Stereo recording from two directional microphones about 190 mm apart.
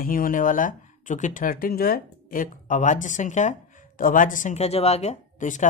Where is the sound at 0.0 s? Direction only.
50° left (ahead or behind).